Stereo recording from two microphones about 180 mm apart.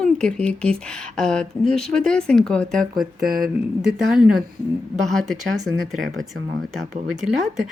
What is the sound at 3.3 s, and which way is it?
Speech, 55° right (ahead or behind).